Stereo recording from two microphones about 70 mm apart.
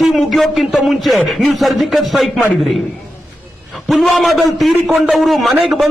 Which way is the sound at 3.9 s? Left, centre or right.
Centre.